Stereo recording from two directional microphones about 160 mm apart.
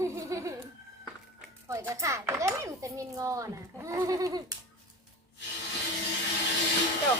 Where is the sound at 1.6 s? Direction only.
20° right (ahead or behind).